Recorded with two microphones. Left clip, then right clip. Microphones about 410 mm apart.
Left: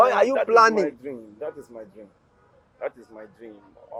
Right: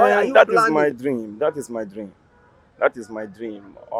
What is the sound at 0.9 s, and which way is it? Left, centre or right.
Speech, right.